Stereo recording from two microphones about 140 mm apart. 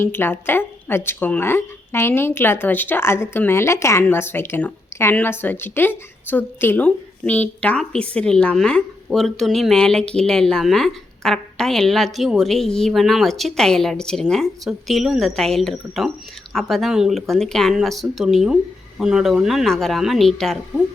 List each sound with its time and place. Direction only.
0.0 s a woman's voice: 15° left (ahead or behind)